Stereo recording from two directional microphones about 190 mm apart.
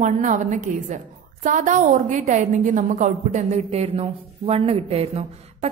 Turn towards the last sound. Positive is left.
turn(degrees=-35)  # may be behind; listen again after turning